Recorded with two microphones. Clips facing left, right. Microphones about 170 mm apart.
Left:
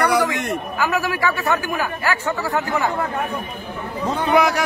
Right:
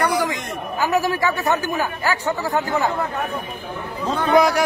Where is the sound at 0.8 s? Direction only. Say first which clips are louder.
Right 3 dB; 40° right (ahead or behind).